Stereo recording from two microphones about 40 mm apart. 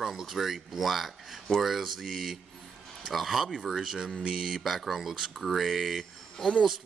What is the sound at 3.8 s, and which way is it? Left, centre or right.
Speech, centre.